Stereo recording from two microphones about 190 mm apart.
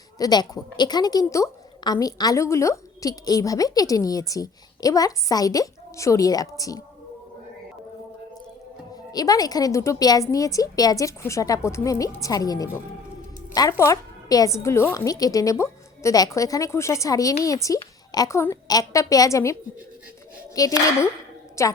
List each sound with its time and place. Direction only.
0.2 s a woman's voice: 20° left (ahead or behind)
9.1 s a woman's voice: 20° left (ahead or behind)
20.6 s a woman's voice: 15° left (ahead or behind)